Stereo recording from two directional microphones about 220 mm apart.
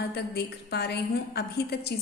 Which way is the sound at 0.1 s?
45° left (ahead or behind).